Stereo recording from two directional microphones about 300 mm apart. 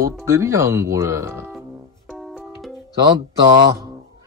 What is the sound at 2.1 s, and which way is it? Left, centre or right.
Music, centre.